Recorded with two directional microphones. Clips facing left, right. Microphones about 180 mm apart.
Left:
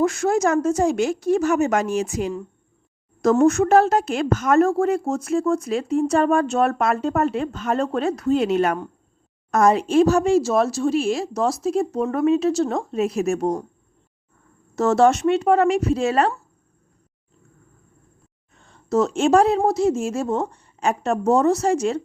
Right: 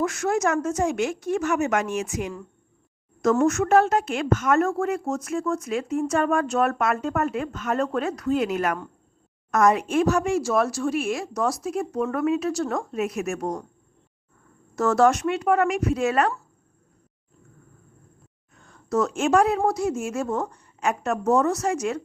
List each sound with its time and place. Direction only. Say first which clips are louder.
0.0 s a woman's voice: left 4 dB; 30° left (ahead or behind)
14.8 s a woman's voice: left 3 dB; 25° left (ahead or behind)
18.5 s a woman's voice: left 4 dB; 25° left (ahead or behind)